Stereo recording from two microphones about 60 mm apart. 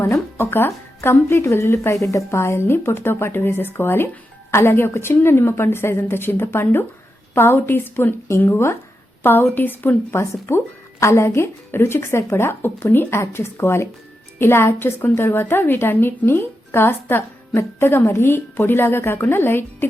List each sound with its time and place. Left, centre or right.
0.0 s speech: left
9.2 s speech: left
10.2 s speech: left